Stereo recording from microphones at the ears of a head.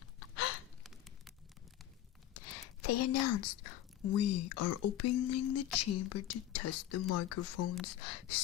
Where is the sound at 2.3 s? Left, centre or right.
Left.